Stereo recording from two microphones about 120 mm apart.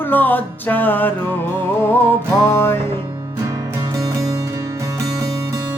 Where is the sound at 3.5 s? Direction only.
30° right (ahead or behind).